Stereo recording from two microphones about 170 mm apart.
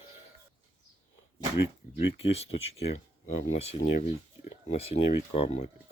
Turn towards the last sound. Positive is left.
turn(degrees=35)  # may be behind; listen again after turning